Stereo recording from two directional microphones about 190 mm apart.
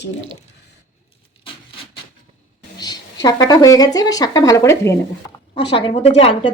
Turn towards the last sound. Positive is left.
turn(degrees=30)  # may be behind; listen again after turning